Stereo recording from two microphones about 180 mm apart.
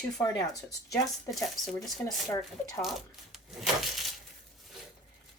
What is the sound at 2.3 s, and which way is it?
Speech, 15° left (ahead or behind).